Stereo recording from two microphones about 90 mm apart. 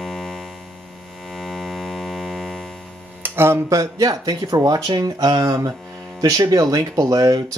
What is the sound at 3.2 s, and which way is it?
Speech, 25° right (ahead or behind).